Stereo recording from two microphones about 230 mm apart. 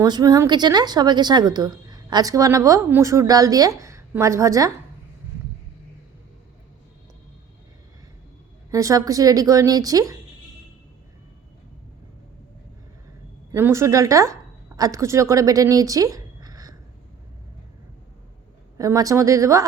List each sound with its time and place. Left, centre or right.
0.0 s a woman's voice: centre
8.7 s a woman's voice: centre
13.5 s a woman's voice: centre
18.8 s a woman's voice: centre